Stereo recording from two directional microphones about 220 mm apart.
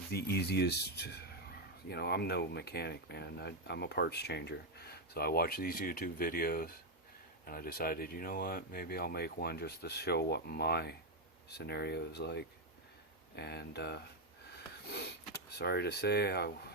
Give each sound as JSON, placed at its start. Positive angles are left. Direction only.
{"t": 0.1, "sound": "a man's voice", "side_deg": 50}